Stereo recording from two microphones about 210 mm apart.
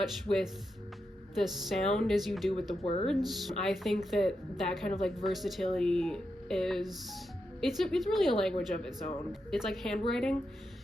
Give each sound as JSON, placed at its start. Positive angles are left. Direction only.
{"t": 0.3, "sound": "speech", "side_deg": 0}
{"t": 2.8, "sound": "speech", "side_deg": 30}
{"t": 3.2, "sound": "speech", "side_deg": 0}